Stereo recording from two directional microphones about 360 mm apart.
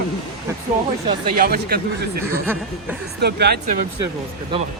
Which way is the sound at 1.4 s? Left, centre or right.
Right.